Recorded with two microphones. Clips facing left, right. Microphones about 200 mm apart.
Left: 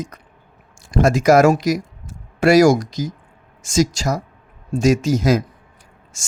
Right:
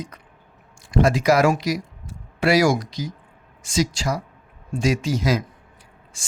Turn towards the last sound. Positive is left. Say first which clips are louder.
# left 1 dB
turn(degrees=45)  # may be behind; listen again after turning